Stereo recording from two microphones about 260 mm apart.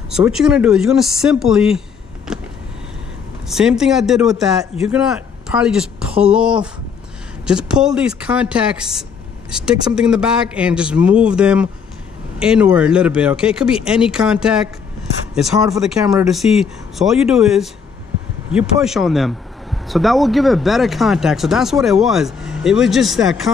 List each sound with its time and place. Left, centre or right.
0.1 s speech: centre
3.4 s speech: centre
15.8 s speech: centre